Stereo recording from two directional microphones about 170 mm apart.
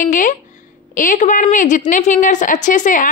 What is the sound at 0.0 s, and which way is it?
A woman's voice, 50° left (ahead or behind).